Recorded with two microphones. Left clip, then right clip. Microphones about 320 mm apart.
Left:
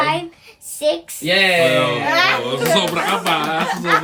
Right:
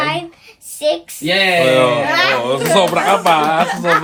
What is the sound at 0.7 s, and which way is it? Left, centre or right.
Speech, centre.